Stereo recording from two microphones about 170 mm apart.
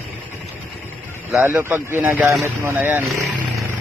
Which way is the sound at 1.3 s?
15° right (ahead or behind).